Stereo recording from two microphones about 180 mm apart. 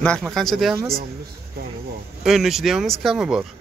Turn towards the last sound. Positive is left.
turn(degrees=-5)  # may be behind; listen again after turning